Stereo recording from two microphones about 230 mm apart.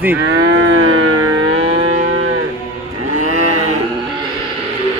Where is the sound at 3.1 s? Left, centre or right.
Right.